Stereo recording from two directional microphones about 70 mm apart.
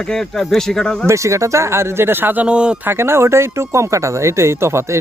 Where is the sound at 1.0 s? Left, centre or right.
Right.